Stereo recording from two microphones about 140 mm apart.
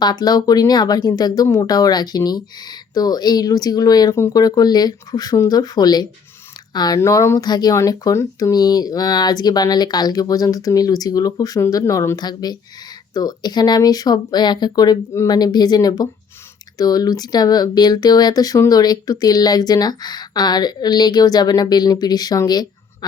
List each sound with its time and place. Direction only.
0.0 s speech: 30° left (ahead or behind)